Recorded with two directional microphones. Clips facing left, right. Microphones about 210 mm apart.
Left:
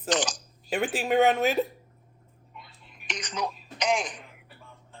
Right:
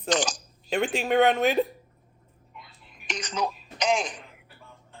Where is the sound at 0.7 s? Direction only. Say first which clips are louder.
Right 1 dB; 5° left (ahead or behind).